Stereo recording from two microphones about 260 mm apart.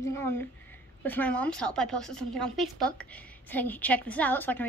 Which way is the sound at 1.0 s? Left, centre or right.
Centre.